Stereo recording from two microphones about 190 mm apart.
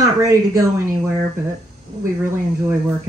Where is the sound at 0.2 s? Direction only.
15° right (ahead or behind).